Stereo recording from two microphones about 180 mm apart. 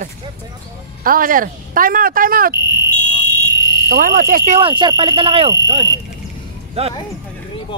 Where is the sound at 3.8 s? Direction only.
60° right (ahead or behind).